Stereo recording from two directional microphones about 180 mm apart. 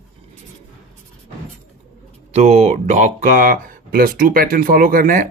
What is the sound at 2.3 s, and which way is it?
Speech, 35° right (ahead or behind).